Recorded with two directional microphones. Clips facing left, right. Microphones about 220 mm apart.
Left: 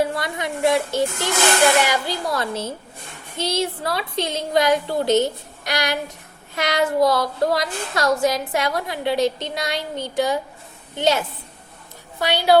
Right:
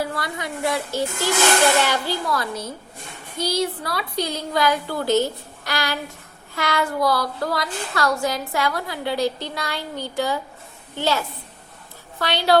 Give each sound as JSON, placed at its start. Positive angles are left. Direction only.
{"t": 0.0, "sound": "a woman's voice", "side_deg": 20}
{"t": 2.3, "sound": "a woman's voice", "side_deg": 25}